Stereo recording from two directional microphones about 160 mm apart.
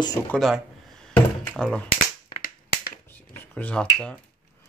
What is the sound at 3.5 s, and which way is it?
Speech, 5° left (ahead or behind).